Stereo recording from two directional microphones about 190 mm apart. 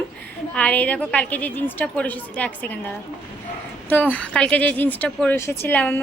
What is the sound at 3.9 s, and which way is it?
Speech, 10° left (ahead or behind).